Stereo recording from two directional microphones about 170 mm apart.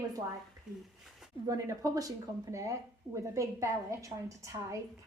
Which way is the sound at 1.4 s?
20° right (ahead or behind).